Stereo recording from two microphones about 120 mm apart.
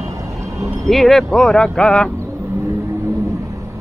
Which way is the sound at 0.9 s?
Centre (ahead or behind).